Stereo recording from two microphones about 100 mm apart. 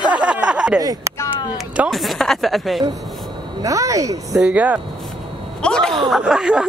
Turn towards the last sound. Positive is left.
turn(degrees=-10)  # may be behind; listen again after turning